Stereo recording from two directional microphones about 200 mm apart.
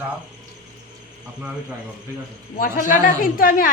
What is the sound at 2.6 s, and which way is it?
A woman's voice, 45° left (ahead or behind).